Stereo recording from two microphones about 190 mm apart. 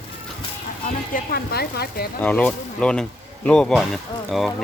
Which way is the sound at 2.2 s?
10° left (ahead or behind).